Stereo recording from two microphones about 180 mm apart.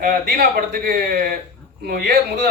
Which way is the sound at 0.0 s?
55° right (ahead or behind).